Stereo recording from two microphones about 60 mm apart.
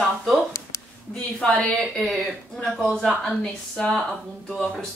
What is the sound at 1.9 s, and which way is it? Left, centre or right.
Speech, centre.